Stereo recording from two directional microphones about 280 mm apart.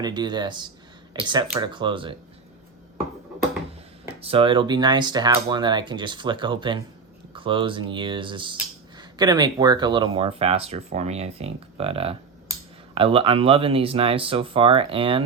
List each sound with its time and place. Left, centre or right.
0.0 s speech: centre
4.1 s speech: centre